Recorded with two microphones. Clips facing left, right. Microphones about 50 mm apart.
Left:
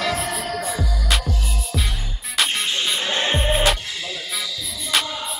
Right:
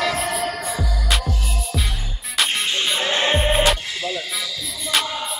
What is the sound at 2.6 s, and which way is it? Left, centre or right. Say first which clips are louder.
Music: right 2 dB; centre.